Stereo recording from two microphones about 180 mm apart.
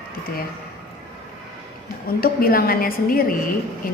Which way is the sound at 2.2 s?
55° left (ahead or behind).